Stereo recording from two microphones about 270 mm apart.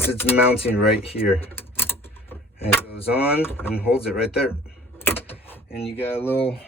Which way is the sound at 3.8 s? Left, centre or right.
Centre.